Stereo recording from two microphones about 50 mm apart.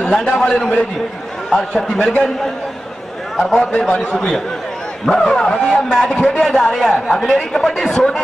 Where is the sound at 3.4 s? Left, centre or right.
Centre.